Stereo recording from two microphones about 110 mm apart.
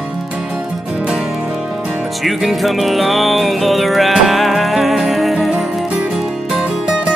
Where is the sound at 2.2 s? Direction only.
Centre (ahead or behind).